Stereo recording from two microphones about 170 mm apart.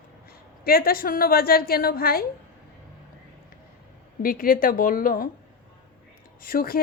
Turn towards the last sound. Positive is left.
turn(degrees=60)  # may be behind; listen again after turning